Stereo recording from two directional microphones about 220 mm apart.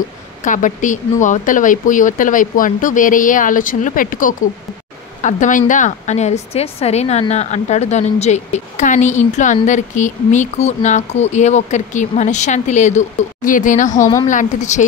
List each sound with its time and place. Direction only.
0.5 s a woman's voice: 35° left (ahead or behind)